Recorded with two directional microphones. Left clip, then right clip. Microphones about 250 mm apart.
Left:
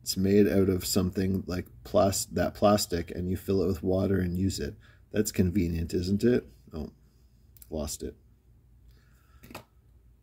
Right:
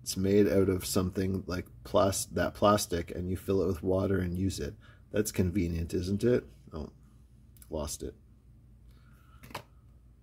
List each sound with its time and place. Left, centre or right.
0.0 s speech: centre